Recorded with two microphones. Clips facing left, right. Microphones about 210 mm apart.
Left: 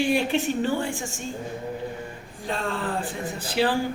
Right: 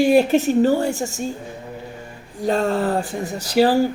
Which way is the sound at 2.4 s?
40° right (ahead or behind).